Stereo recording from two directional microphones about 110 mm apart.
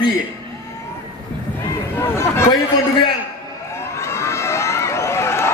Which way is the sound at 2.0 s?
25° left (ahead or behind).